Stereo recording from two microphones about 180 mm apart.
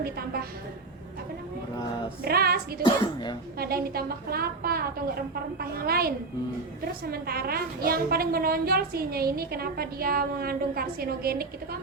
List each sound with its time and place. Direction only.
0.0 s a woman's voice: 60° right (ahead or behind)
2.2 s a woman's voice: 60° right (ahead or behind)
2.8 s speech: 25° left (ahead or behind)
3.6 s a woman's voice: 55° right (ahead or behind)